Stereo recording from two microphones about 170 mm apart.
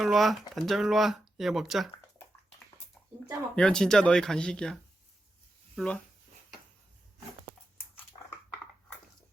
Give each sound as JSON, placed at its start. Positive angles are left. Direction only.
{"t": 0.0, "sound": "speech", "side_deg": 0}
{"t": 3.5, "sound": "speech", "side_deg": 5}